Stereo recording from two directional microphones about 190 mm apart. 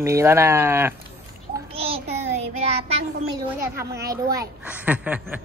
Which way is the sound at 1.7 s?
30° right (ahead or behind).